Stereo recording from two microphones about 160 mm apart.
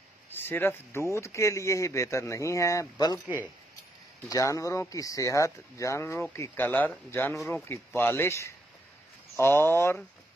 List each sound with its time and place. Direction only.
0.3 s speech: 15° left (ahead or behind)
4.3 s speech: 20° left (ahead or behind); by 7.6 s 5° left (ahead or behind)
7.6 s speech: 15° left (ahead or behind)